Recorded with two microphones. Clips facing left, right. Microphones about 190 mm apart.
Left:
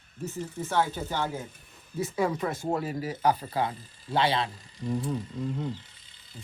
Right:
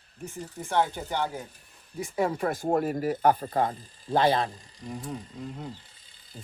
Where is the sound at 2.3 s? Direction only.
40° right (ahead or behind).